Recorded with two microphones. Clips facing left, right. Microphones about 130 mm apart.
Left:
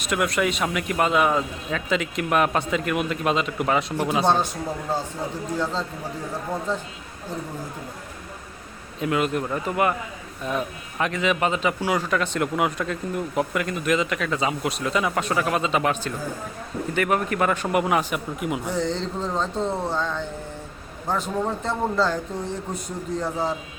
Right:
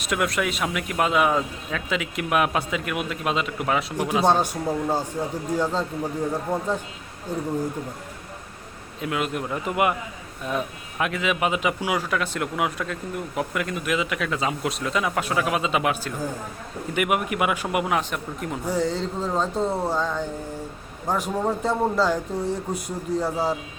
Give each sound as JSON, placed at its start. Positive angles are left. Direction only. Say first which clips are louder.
{"t": 0.0, "sound": "a man's voice", "louder": "left 1 dB", "side_deg": 0}
{"t": 4.3, "sound": "speech", "louder": "right 1 dB", "side_deg": -10}
{"t": 9.0, "sound": "a man's voice", "louder": "left 3 dB", "side_deg": 0}
{"t": 9.6, "sound": "speech", "louder": "right 1 dB", "side_deg": -15}
{"t": 10.4, "sound": "a man's voice", "louder": "left 1 dB", "side_deg": 0}
{"t": 18.7, "sound": "speech", "louder": "right 5 dB", "side_deg": -5}